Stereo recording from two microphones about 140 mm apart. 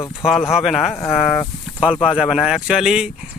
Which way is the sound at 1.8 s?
10° right (ahead or behind).